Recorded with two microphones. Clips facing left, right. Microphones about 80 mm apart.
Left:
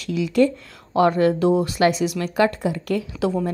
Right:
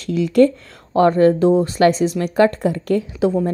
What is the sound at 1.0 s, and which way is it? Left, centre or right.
A woman's voice, right.